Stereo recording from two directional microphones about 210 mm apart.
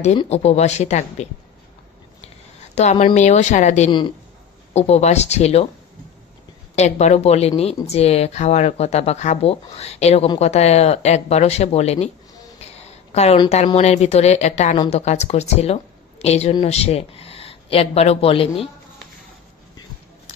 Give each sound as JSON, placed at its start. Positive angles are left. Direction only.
{"t": 0.0, "sound": "speech", "side_deg": 30}
{"t": 2.2, "sound": "a sound", "side_deg": 30}
{"t": 3.2, "sound": "speech", "side_deg": 35}
{"t": 6.7, "sound": "a woman's voice", "side_deg": 30}